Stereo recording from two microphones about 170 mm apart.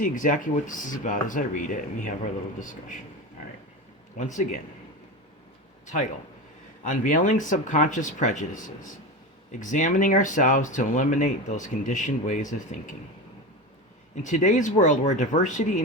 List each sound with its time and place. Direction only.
0.0 s speech: 50° left (ahead or behind)
4.2 s speech: 45° left (ahead or behind)
5.8 s speech: 45° left (ahead or behind)
14.2 s speech: 45° left (ahead or behind)